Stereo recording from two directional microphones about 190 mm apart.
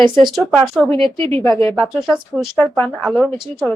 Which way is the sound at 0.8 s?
25° right (ahead or behind).